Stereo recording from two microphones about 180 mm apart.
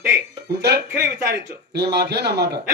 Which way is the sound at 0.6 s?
65° right (ahead or behind).